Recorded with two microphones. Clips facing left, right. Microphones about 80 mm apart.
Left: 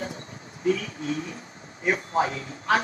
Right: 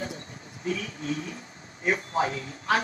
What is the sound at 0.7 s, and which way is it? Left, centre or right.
Speech, left.